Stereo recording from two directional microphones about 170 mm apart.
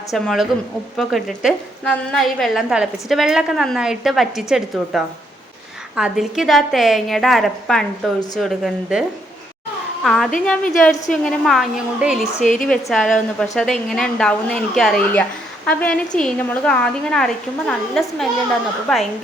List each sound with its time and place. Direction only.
0.1 s a woman's voice: centre (ahead or behind)
12.3 s a woman's voice: 45° left (ahead or behind)
12.6 s a woman's voice: centre (ahead or behind)